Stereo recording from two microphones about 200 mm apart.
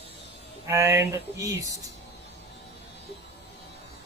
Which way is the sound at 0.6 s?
15° right (ahead or behind).